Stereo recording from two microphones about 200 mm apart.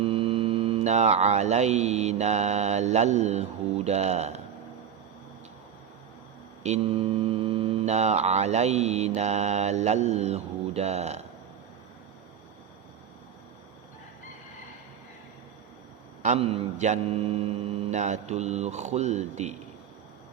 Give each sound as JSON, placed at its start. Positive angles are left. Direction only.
{"t": 0.0, "sound": "mantra", "side_deg": -30}
{"t": 6.6, "sound": "mantra", "side_deg": -30}
{"t": 16.2, "sound": "mantra", "side_deg": -35}